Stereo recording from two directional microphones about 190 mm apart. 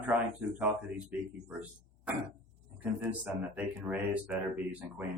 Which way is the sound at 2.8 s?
5° right (ahead or behind).